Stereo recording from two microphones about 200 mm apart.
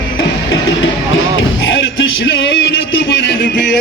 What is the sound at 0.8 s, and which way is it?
Music, 75° left (ahead or behind).